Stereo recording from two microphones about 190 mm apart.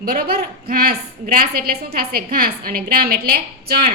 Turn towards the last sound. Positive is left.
turn(degrees=-55)  # may be behind; listen again after turning